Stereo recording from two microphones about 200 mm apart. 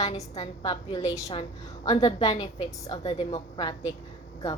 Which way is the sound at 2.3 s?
30° left (ahead or behind).